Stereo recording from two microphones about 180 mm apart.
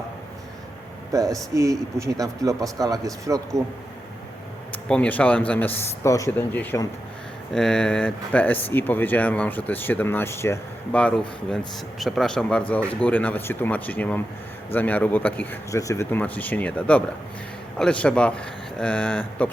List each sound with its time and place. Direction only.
1.1 s speech: 20° right (ahead or behind)
4.9 s speech: 10° left (ahead or behind)